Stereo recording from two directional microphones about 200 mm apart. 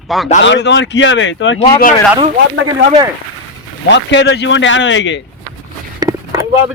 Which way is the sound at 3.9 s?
60° left (ahead or behind).